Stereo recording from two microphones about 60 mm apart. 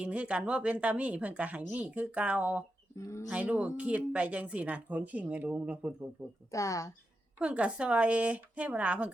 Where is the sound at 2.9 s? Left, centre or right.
Left.